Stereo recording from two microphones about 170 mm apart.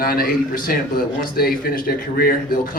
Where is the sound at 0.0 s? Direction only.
60° left (ahead or behind).